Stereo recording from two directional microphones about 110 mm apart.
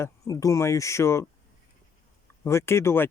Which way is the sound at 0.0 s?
30° left (ahead or behind).